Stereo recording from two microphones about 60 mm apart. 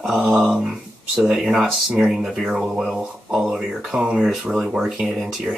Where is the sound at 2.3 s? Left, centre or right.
Centre.